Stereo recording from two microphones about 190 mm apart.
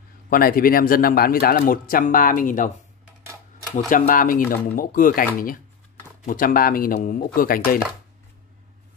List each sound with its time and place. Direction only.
0.3 s a man's voice: 50° left (ahead or behind)
3.7 s a man's voice: 40° left (ahead or behind)